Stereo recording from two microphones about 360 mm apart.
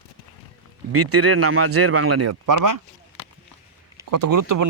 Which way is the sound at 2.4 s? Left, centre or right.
Right.